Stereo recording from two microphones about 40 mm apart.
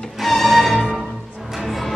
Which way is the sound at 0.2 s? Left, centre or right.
Centre.